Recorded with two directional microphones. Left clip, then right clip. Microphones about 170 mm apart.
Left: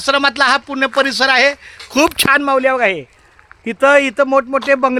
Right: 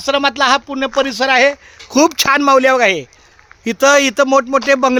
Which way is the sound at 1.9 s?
55° right (ahead or behind).